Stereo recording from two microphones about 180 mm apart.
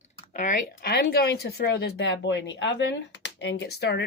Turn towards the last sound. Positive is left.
turn(degrees=70)  # may be behind; listen again after turning